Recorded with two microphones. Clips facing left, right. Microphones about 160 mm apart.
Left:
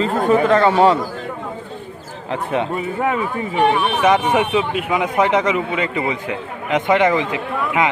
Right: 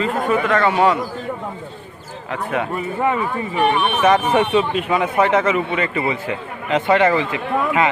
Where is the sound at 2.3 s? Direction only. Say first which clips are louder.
Left 2 dB; 25° left (ahead or behind).